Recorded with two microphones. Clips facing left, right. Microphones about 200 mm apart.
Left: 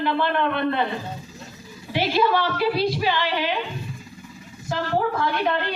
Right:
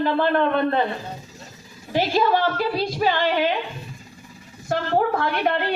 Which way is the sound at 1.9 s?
45° right (ahead or behind).